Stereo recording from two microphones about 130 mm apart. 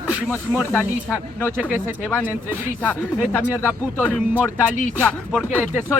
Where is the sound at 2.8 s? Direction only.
20° left (ahead or behind).